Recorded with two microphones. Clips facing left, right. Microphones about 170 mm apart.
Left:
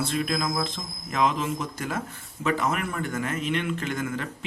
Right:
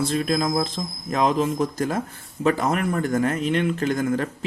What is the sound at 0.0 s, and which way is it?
A man's voice, 40° right (ahead or behind).